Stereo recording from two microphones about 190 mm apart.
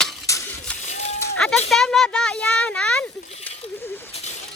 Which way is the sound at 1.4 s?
5° left (ahead or behind).